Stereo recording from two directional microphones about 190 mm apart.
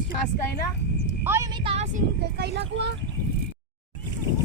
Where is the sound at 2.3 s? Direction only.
60° right (ahead or behind).